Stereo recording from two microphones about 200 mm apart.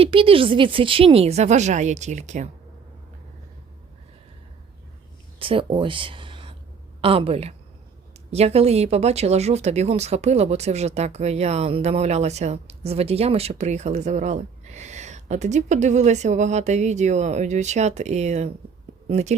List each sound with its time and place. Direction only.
0.0 s speech: 25° right (ahead or behind)
5.4 s a woman's voice: 25° right (ahead or behind)